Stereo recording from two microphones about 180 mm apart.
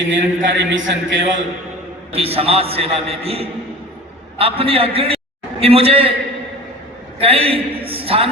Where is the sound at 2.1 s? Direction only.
35° right (ahead or behind).